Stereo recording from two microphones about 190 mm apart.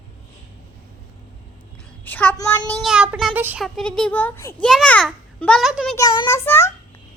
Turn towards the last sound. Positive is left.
turn(degrees=15)  # may be behind; listen again after turning